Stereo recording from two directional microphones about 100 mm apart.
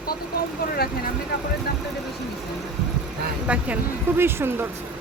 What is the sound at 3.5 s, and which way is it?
Speech, 15° right (ahead or behind).